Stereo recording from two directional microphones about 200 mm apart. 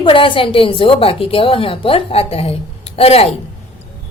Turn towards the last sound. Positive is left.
turn(degrees=30)  # may be behind; listen again after turning